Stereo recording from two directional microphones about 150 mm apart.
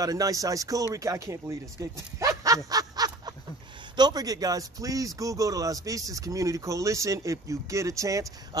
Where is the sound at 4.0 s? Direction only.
25° right (ahead or behind).